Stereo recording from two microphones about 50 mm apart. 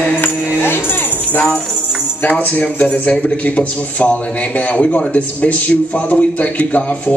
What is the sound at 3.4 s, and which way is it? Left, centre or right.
A man's voice, left.